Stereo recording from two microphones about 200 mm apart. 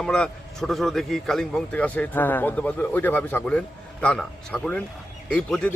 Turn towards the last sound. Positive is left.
turn(degrees=5)  # may be behind; listen again after turning